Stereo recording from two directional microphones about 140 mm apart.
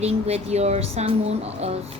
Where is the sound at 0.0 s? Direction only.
50° right (ahead or behind).